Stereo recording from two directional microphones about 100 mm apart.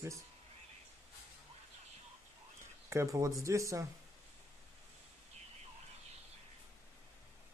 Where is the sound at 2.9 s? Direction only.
30° right (ahead or behind).